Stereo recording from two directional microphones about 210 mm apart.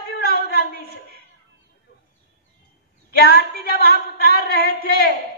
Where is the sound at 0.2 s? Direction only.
50° left (ahead or behind).